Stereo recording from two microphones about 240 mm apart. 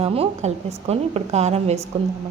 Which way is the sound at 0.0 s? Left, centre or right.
Right.